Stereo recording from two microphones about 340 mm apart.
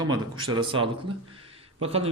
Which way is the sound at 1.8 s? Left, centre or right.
Centre.